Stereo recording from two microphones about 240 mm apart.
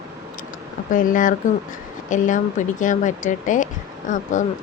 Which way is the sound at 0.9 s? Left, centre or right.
Left.